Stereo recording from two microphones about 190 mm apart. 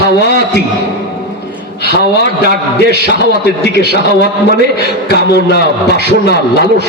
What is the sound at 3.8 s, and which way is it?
A man's voice, 60° left (ahead or behind).